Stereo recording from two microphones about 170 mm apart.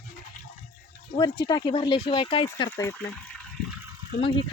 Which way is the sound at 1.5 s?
30° left (ahead or behind).